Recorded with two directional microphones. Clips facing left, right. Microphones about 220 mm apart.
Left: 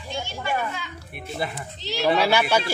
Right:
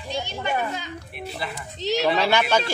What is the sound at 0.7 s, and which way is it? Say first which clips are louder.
Speech: right 3 dB; 40° right (ahead or behind).